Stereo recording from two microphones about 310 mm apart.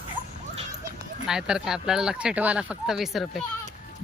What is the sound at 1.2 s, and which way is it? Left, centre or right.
Speech, centre.